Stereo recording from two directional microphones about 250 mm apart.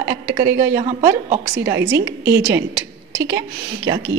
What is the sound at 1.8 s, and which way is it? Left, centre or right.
Speech, right.